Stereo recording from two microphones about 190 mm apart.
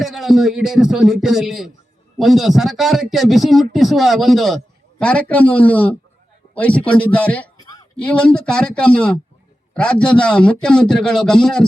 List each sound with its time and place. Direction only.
0.0 s a man's voice: centre (ahead or behind)
7.6 s a sound: 20° left (ahead or behind)
7.9 s a man's voice: 5° left (ahead or behind)